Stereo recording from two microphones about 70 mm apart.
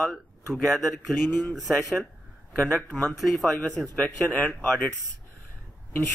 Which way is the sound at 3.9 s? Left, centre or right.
Left.